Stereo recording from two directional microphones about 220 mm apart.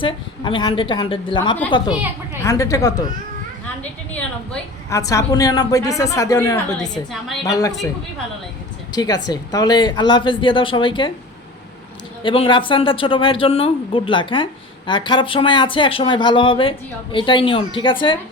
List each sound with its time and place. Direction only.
0.0 s a woman's voice: 20° left (ahead or behind)
4.1 s a woman's voice: 5° left (ahead or behind)
8.9 s speech: 15° left (ahead or behind)
12.2 s speech: 25° left (ahead or behind)